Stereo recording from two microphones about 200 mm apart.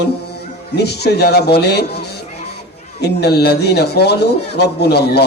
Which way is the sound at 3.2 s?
55° left (ahead or behind).